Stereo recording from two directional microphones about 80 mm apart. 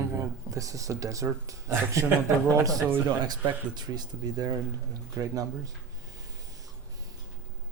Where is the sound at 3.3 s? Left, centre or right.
Right.